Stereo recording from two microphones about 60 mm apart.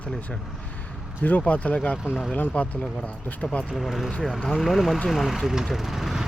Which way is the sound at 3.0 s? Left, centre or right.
Left.